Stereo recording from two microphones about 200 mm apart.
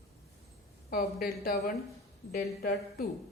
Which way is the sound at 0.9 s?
50° left (ahead or behind).